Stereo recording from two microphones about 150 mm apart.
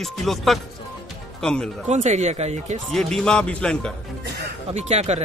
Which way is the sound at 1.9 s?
50° right (ahead or behind).